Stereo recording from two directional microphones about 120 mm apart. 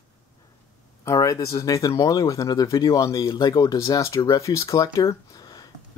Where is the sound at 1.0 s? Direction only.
30° left (ahead or behind).